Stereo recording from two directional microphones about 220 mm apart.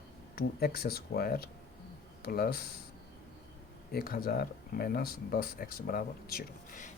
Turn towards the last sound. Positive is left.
turn(degrees=40)  # may be behind; listen again after turning